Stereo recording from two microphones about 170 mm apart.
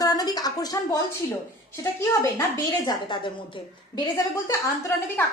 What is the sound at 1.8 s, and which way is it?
A woman's voice, 15° left (ahead or behind).